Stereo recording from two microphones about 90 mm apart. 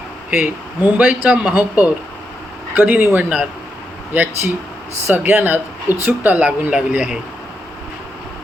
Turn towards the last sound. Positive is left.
turn(degrees=-10)  # may be behind; listen again after turning